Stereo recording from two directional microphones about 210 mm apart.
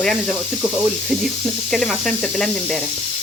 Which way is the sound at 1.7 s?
Centre (ahead or behind).